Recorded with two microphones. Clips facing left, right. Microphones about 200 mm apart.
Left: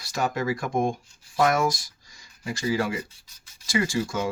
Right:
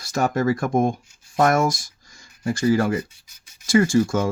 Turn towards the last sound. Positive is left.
turn(degrees=-50)  # may be behind; listen again after turning